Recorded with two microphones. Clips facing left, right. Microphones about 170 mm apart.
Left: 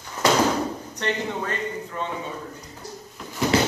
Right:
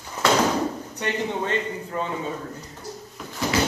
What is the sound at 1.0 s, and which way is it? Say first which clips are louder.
Speech: left 1 dB; 10° right (ahead or behind).